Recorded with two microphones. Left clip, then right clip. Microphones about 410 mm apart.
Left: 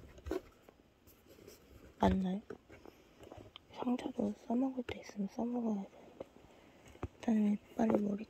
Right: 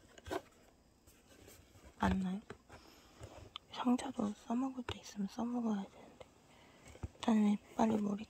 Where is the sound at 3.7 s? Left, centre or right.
Centre.